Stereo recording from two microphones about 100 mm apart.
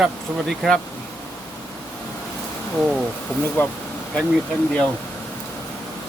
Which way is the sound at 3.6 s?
20° left (ahead or behind).